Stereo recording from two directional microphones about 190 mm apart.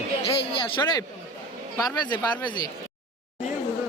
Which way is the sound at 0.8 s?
20° left (ahead or behind).